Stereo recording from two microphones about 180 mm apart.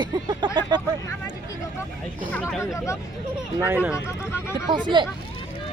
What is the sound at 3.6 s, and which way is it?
Speech, 10° right (ahead or behind).